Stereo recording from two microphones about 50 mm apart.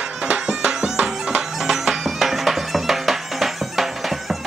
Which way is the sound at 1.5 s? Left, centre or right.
Centre.